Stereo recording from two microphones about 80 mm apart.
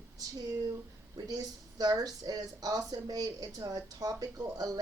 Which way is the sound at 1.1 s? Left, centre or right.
Right.